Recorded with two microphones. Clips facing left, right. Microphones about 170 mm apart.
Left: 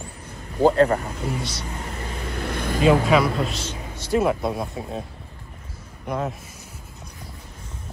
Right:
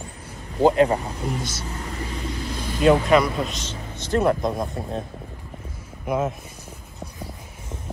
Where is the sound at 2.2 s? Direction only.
60° left (ahead or behind).